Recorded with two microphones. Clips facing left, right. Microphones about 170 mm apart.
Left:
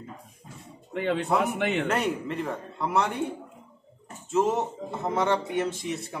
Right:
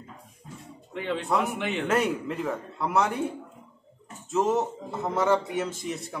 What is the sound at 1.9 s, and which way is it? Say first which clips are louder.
Speech: right 2 dB; centre (ahead or behind).